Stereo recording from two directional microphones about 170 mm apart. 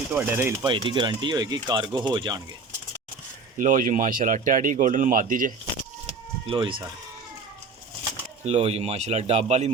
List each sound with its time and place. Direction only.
0.1 s speech: 10° right (ahead or behind)
0.6 s speech: 30° right (ahead or behind)
3.6 s speech: 50° right (ahead or behind)
6.5 s speech: 30° right (ahead or behind)
8.4 s speech: 35° right (ahead or behind)